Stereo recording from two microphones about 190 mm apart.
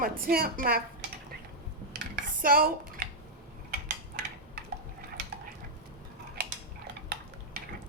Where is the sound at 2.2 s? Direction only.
50° right (ahead or behind).